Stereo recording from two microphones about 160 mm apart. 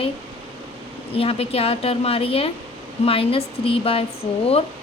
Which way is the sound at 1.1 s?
35° left (ahead or behind).